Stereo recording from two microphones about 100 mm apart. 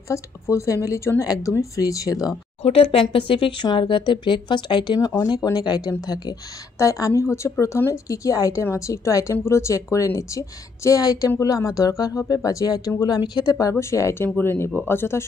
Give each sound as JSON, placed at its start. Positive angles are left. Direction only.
{"t": 0.1, "sound": "speech", "side_deg": 30}
{"t": 2.6, "sound": "speech", "side_deg": 75}